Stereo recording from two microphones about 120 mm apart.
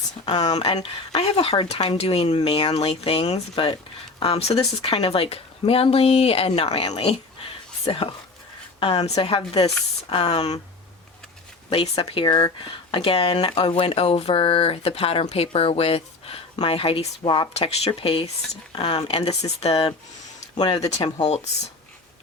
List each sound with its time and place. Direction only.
0.5 s speech: 55° left (ahead or behind)
11.7 s speech: 55° left (ahead or behind)
17.5 s speech: 55° left (ahead or behind)
18.7 s speech: 35° left (ahead or behind)
19.0 s speech: 55° left (ahead or behind)
20.8 s speech: 35° left (ahead or behind)